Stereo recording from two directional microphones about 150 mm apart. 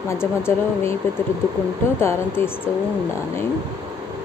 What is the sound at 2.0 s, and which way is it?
Speech, 15° left (ahead or behind).